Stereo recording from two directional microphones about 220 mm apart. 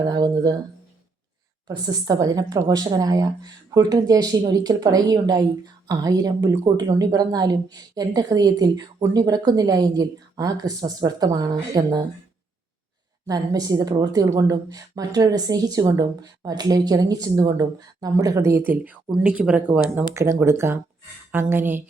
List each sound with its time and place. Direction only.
0.0 s a sound: 20° right (ahead or behind)
1.6 s a woman's voice: 15° right (ahead or behind)
13.2 s a woman's voice: 15° right (ahead or behind)